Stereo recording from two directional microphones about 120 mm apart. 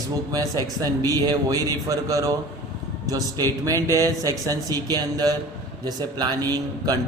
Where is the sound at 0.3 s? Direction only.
30° right (ahead or behind).